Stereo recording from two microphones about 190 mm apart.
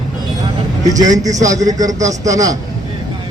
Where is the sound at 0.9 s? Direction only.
20° right (ahead or behind).